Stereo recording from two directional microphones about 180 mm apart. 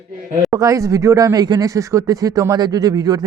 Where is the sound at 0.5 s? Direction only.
20° right (ahead or behind).